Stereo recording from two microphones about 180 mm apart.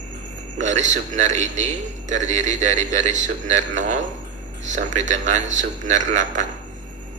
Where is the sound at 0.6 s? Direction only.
40° right (ahead or behind).